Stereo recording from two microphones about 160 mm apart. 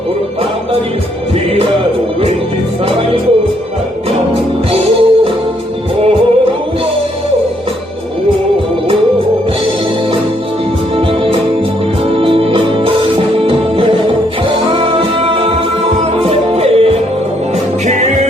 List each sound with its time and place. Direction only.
4.7 s music: 35° right (ahead or behind)
12.1 s music: 35° right (ahead or behind)
16.1 s music: 40° right (ahead or behind)